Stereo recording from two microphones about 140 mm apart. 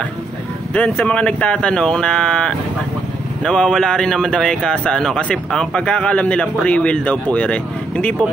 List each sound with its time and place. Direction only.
0.7 s speech: 5° left (ahead or behind)